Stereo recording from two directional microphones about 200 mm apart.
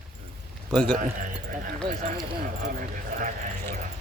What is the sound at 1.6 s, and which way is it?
Speech, 45° right (ahead or behind).